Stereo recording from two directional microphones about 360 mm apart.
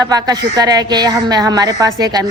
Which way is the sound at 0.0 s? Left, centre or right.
Centre.